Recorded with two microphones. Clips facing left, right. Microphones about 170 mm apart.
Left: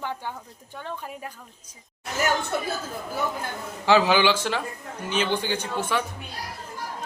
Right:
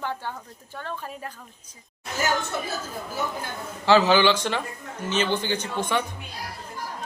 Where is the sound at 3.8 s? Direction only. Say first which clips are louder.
Right 1 dB; 10° left (ahead or behind).